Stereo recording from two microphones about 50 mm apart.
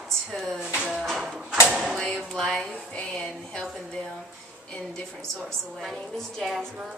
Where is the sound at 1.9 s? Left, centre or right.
Centre.